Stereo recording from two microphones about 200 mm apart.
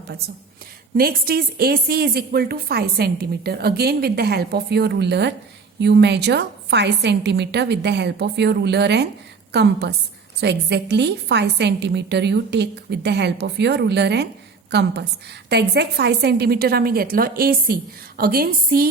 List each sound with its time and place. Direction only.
0.9 s a woman's voice: 50° right (ahead or behind)